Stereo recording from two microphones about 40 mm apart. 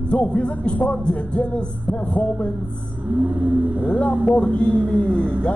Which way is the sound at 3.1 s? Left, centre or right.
Right.